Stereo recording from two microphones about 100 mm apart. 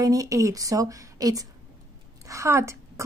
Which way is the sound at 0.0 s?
35° right (ahead or behind).